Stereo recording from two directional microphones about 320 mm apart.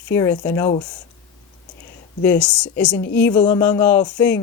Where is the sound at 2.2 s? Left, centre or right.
Centre.